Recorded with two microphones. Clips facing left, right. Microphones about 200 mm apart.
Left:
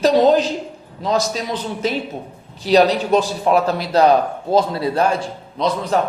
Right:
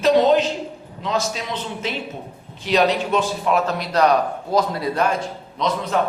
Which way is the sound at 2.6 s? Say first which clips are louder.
Left 4 dB; 35° left (ahead or behind).